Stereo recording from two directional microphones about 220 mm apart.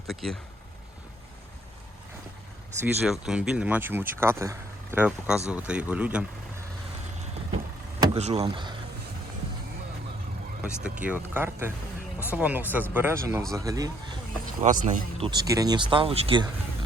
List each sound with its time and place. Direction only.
0.1 s speech: centre (ahead or behind)
2.8 s speech: 5° right (ahead or behind)
8.0 s speech: 25° right (ahead or behind)
10.6 s speech: 5° right (ahead or behind)
14.6 s speech: 35° right (ahead or behind)
15.3 s speech: 15° right (ahead or behind)